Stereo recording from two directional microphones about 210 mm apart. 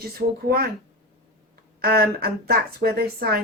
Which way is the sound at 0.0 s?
45° right (ahead or behind).